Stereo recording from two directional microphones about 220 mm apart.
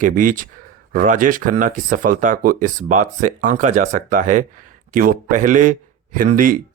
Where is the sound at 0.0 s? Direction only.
35° right (ahead or behind).